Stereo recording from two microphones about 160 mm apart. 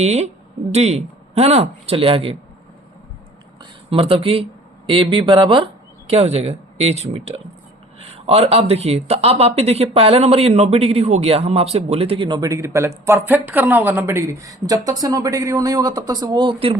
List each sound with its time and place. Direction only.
0.0 s speech: 45° right (ahead or behind)
3.6 s speech: 35° right (ahead or behind)